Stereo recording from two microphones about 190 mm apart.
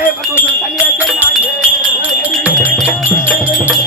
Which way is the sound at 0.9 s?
Centre (ahead or behind).